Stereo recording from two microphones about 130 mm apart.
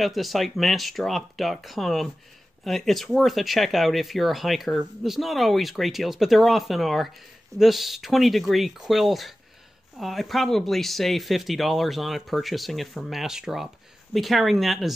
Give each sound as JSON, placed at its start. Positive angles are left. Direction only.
{"t": 0.0, "sound": "speech", "side_deg": 0}